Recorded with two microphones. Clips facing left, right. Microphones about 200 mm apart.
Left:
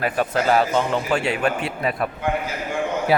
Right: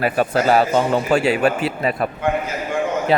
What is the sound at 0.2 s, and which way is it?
A man's voice, 35° right (ahead or behind).